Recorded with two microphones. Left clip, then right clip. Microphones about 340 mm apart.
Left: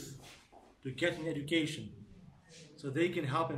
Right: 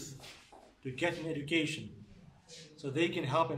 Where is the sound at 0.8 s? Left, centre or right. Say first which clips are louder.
Even; centre.